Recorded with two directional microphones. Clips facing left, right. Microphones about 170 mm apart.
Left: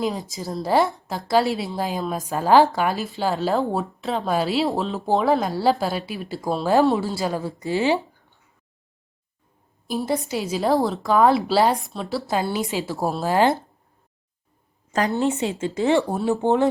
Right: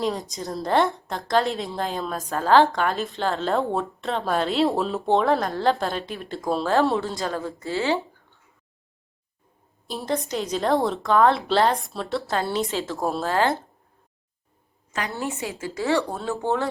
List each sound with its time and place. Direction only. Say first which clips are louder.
0.0 s a woman's voice: left 1 dB; centre (ahead or behind)
10.0 s a woman's voice: left 1 dB; 5° left (ahead or behind)
15.1 s speech: left 7 dB; 20° left (ahead or behind)